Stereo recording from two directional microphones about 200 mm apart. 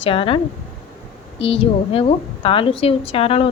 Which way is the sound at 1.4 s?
30° left (ahead or behind).